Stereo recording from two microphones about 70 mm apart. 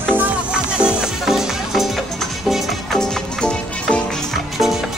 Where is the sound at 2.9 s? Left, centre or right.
Centre.